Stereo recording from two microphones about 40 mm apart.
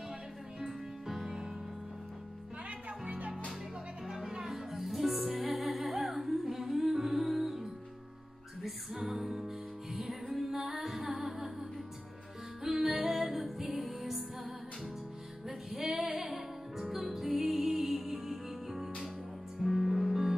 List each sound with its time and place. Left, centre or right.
0.6 s music: centre
3.1 s music: right
4.1 s music: centre
5.4 s humming: centre
8.6 s music: centre
12.6 s music: centre
15.4 s music: centre